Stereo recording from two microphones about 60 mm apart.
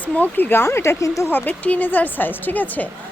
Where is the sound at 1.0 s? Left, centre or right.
Left.